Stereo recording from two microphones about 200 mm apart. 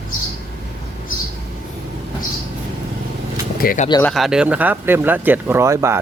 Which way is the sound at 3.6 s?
45° left (ahead or behind).